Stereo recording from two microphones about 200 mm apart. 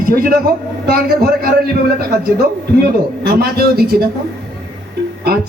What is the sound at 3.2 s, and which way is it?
Speech, 50° right (ahead or behind).